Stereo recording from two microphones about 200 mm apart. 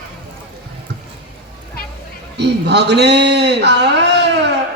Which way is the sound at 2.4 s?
60° right (ahead or behind).